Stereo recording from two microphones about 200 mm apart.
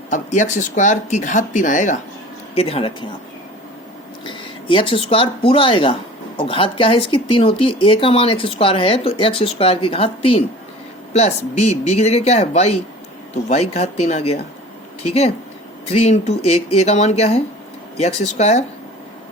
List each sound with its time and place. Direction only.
0.1 s speech: 40° left (ahead or behind)
4.3 s speech: 25° left (ahead or behind)